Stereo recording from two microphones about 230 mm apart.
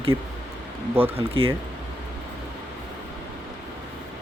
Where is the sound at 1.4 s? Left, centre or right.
Right.